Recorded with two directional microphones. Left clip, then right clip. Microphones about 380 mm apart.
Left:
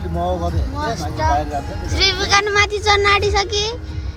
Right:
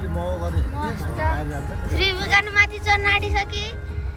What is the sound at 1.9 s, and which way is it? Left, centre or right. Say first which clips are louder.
Speech: left 4 dB; centre.